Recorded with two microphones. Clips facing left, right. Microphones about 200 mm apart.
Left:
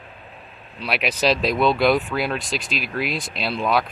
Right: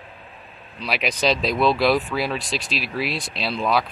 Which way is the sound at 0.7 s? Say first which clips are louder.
Left 1 dB; 5° left (ahead or behind).